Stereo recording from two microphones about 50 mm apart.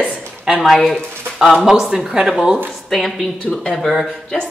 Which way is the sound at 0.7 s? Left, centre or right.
Centre.